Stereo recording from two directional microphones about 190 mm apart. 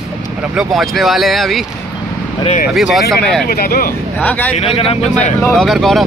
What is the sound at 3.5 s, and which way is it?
Speech, 50° left (ahead or behind).